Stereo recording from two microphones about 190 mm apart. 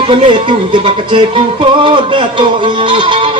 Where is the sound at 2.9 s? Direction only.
25° right (ahead or behind).